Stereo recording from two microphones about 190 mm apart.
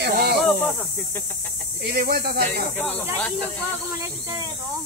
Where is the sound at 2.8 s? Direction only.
10° left (ahead or behind).